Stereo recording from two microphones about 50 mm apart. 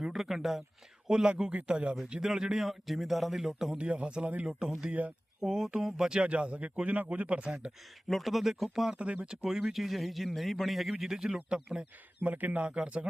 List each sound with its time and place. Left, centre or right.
0.0 s a man's voice: centre
3.8 s speech: right
4.4 s a man's voice: centre
4.9 s speech: right
5.4 s speech: centre
8.0 s a man's voice: centre
9.0 s speech: right
9.2 s a man's voice: centre
12.2 s speech: right
12.6 s speech: right